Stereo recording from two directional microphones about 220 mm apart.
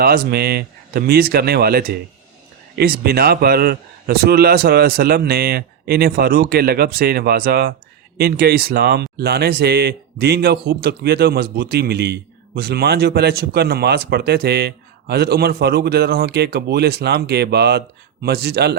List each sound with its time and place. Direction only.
0.0 s a man's voice: 45° right (ahead or behind)